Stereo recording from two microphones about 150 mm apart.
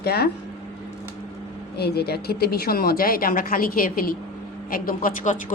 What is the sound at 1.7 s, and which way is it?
Speech, 90° left.